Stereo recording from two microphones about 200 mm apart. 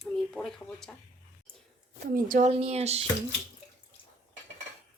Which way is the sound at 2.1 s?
40° right (ahead or behind).